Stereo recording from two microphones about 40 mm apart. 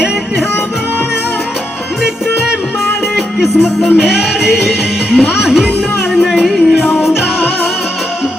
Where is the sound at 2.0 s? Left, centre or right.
Centre.